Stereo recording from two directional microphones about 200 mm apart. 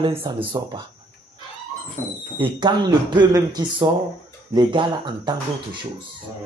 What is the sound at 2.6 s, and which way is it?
Speech, 20° right (ahead or behind).